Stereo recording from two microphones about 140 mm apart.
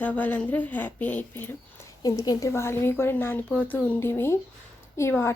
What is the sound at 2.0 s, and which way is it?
A woman's voice, 25° left (ahead or behind).